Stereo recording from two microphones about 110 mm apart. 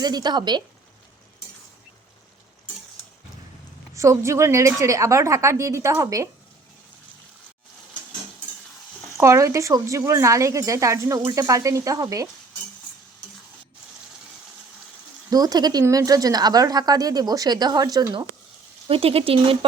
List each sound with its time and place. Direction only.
0.0 s a woman's voice: 40° right (ahead or behind)
3.9 s a woman's voice: 30° right (ahead or behind)
9.1 s a woman's voice: 25° right (ahead or behind)
15.3 s a woman's voice: 35° right (ahead or behind)
18.9 s speech: 60° right (ahead or behind)